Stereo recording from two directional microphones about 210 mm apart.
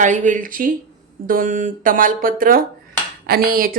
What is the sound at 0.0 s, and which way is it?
A woman's voice, 35° right (ahead or behind).